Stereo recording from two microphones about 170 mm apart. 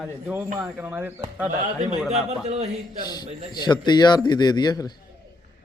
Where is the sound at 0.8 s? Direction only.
15° right (ahead or behind).